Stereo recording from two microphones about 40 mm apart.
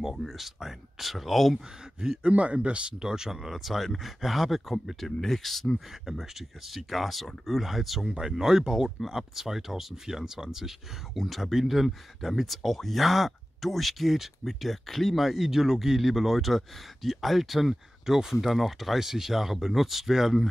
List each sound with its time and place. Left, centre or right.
0.2 s speech: centre
2.0 s speech: centre
2.3 s speech: right; by 5.7 s centre
5.9 s speech: centre
8.2 s speech: centre
11.1 s speech: centre